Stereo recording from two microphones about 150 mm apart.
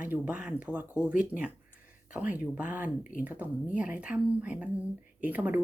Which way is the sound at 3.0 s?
65° left (ahead or behind).